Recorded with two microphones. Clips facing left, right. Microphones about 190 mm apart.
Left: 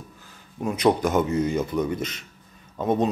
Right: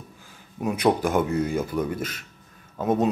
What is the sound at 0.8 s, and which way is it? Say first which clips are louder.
Speech: left 1 dB; 10° right (ahead or behind).